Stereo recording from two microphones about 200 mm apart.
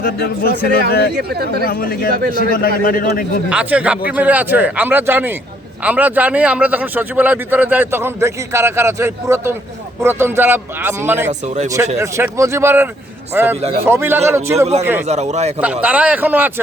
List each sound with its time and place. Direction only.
0.0 s a man's voice: 50° left (ahead or behind)
1.1 s speech: 50° right (ahead or behind)
1.6 s a man's voice: 50° left (ahead or behind)
3.5 s a man's voice: 5° right (ahead or behind)
11.3 s a man's voice: 35° right (ahead or behind)
11.9 s a man's voice: 15° right (ahead or behind)
15.0 s a man's voice: 35° right (ahead or behind)
15.8 s a man's voice: 5° right (ahead or behind)